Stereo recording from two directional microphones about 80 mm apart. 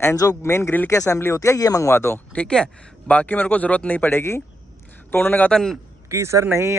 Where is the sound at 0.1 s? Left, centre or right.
Left.